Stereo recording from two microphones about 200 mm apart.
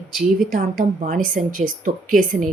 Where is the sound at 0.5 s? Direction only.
40° right (ahead or behind).